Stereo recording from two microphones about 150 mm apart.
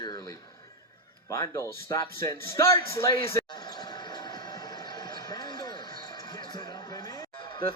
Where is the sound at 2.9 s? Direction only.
20° left (ahead or behind).